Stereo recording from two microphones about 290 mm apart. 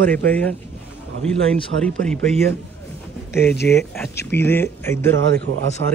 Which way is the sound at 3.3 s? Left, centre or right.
Centre.